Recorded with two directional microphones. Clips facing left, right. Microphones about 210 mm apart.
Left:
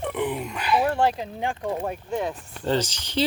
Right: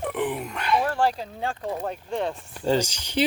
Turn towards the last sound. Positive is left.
turn(degrees=-10)  # may be behind; listen again after turning